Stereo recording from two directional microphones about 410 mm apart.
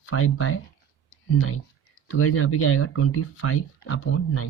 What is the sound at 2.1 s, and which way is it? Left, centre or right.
Speech, left.